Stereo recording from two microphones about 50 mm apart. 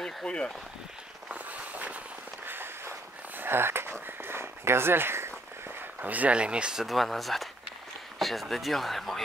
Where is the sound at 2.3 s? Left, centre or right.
Right.